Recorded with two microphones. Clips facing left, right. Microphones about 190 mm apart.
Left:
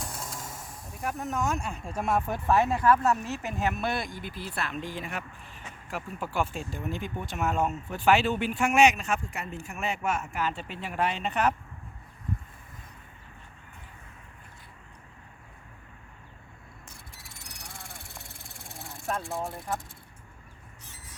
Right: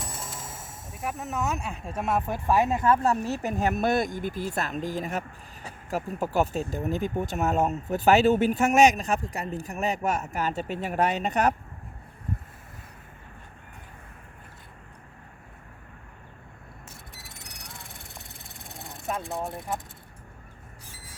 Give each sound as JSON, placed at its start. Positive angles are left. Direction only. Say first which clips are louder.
{"t": 0.0, "sound": "speech", "louder": "even", "side_deg": 0}
{"t": 17.2, "sound": "a sound", "louder": "right 3 dB", "side_deg": 0}
{"t": 18.7, "sound": "vehicle", "louder": "right 1 dB", "side_deg": 0}